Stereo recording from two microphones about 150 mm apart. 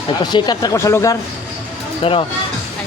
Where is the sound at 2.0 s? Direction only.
40° left (ahead or behind).